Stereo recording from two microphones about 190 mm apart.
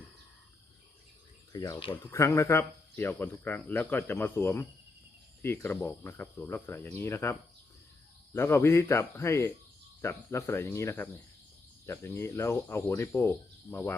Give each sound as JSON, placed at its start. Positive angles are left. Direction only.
{"t": 1.5, "sound": "speech", "side_deg": 20}